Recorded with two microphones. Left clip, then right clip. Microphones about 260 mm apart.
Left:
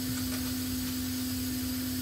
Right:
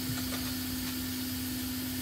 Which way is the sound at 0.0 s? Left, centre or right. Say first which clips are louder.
Left 1 dB; right.